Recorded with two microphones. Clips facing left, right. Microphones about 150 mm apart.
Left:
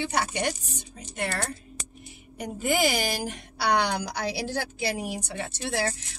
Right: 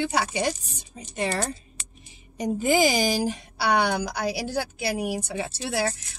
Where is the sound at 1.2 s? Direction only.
15° right (ahead or behind).